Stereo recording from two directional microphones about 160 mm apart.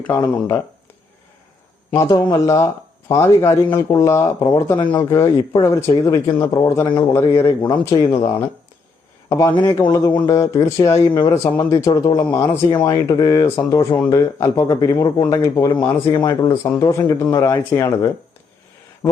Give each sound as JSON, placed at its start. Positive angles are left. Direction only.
{"t": 0.1, "sound": "speech", "side_deg": 15}
{"t": 1.9, "sound": "speech", "side_deg": 20}
{"t": 7.9, "sound": "speech", "side_deg": 30}
{"t": 9.8, "sound": "speech", "side_deg": 25}